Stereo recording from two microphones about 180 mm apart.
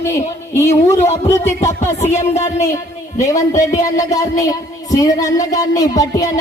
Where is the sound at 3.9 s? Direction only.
20° left (ahead or behind).